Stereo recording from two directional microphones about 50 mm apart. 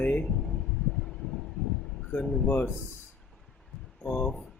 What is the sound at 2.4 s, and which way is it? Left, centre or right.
Speech, left.